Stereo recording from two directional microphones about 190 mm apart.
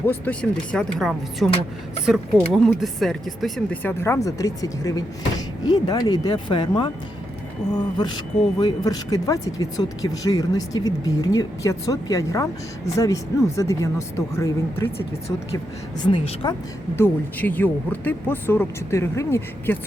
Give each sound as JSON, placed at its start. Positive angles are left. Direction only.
{"t": 0.0, "sound": "speech", "side_deg": 10}
{"t": 8.0, "sound": "speech", "side_deg": 25}
{"t": 16.0, "sound": "speech", "side_deg": 25}
{"t": 16.9, "sound": "speech", "side_deg": 10}